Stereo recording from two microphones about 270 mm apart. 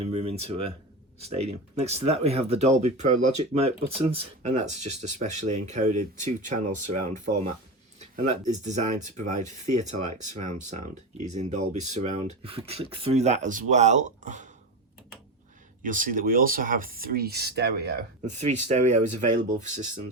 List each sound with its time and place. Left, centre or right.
0.0 s speech: right
1.7 s speech: right
15.8 s speech: right
18.3 s speech: right